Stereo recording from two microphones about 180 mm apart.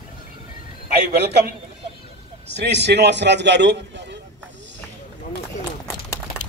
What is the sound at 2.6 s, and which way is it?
A man's voice, 70° right (ahead or behind).